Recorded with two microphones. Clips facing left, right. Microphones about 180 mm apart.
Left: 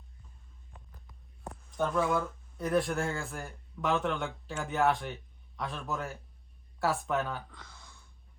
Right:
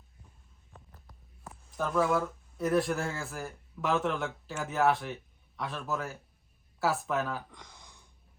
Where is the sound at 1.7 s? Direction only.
Centre (ahead or behind).